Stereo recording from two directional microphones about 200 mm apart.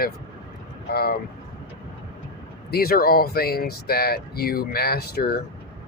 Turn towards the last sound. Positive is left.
turn(degrees=50)  # may be behind; listen again after turning